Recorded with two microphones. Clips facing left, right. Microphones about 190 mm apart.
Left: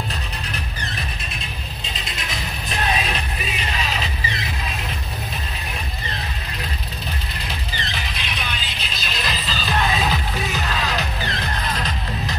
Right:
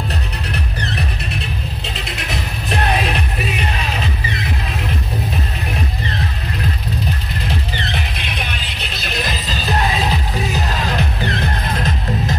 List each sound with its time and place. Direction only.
0.5 s music: 70° right (ahead or behind)
7.7 s music: 60° right (ahead or behind); by 10.8 s 30° right (ahead or behind)
10.8 s music: 55° right (ahead or behind)